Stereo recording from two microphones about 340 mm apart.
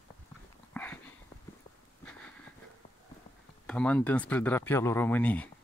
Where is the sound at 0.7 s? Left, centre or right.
Centre.